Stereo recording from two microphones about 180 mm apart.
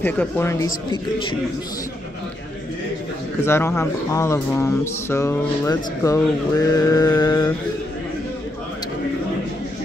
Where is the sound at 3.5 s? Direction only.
15° left (ahead or behind).